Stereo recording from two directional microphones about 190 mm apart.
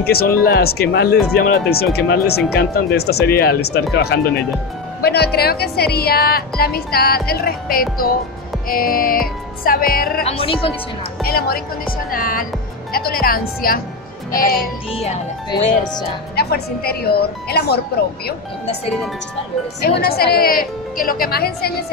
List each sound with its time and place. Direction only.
0.0 s speech: 55° left (ahead or behind)
10.2 s speech: 30° left (ahead or behind)
11.2 s speech: 50° left (ahead or behind)
16.3 s speech: 55° left (ahead or behind)
19.8 s speech: 55° left (ahead or behind)